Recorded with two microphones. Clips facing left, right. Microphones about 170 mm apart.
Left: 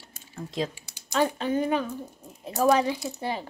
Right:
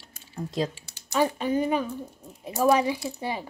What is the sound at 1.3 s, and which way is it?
Speech, 10° right (ahead or behind).